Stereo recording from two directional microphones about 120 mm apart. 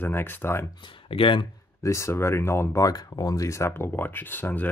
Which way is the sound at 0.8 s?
50° left (ahead or behind).